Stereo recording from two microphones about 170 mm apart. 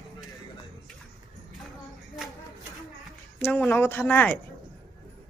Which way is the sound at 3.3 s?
10° left (ahead or behind).